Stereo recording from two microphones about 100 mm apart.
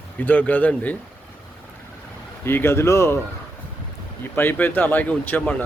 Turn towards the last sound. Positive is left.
turn(degrees=20)  # may be behind; listen again after turning